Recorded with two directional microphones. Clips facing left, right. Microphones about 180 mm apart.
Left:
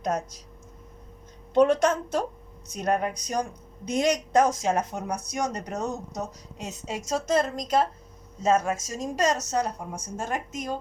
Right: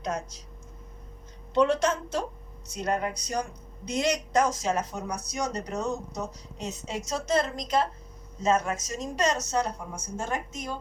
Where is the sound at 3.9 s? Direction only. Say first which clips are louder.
Left 3 dB; 50° left (ahead or behind).